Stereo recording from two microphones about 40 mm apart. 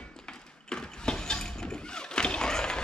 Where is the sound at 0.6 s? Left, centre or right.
Left.